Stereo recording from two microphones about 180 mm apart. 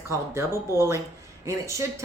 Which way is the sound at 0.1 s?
15° right (ahead or behind).